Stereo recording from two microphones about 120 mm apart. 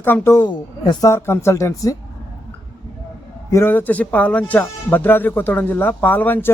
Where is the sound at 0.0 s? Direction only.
20° left (ahead or behind).